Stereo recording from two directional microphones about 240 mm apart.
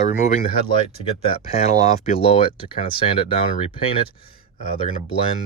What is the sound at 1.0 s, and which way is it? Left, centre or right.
Speech, left.